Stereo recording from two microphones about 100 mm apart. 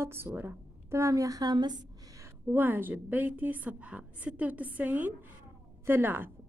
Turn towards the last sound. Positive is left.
turn(degrees=-20)  # may be behind; listen again after turning